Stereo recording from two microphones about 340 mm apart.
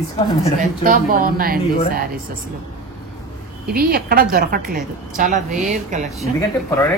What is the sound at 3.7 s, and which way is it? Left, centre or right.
A woman's voice, right.